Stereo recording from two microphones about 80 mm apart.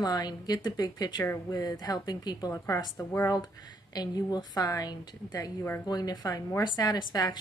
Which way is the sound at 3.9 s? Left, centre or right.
Left.